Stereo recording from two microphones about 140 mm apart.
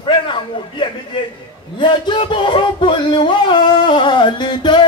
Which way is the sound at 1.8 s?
35° left (ahead or behind).